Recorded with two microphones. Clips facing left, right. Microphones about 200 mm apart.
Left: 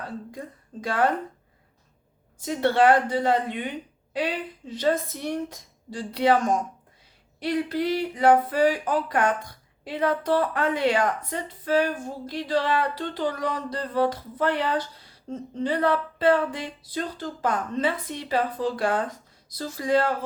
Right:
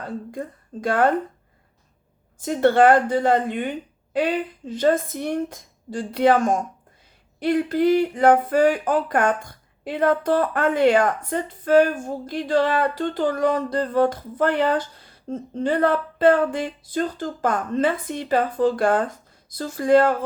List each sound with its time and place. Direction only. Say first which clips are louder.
0.3 s a woman's voice: right 6 dB; 50° right (ahead or behind)
2.4 s speech: right 4 dB; 50° right (ahead or behind)